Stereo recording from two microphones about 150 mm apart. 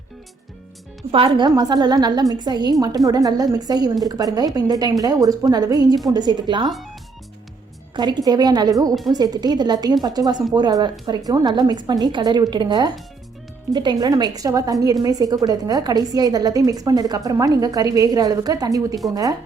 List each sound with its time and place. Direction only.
1.1 s a woman's voice: 35° right (ahead or behind)
7.9 s a woman's voice: 30° right (ahead or behind)